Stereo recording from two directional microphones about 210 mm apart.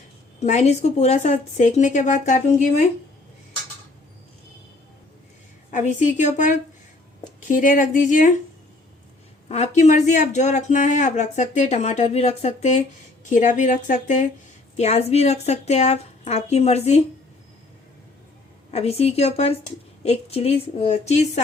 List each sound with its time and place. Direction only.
0.3 s speech: 30° left (ahead or behind)
5.7 s speech: 35° left (ahead or behind)
9.5 s speech: 30° left (ahead or behind)
18.7 s a woman's voice: 30° left (ahead or behind)